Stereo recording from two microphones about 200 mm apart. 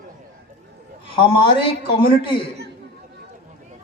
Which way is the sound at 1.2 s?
25° left (ahead or behind).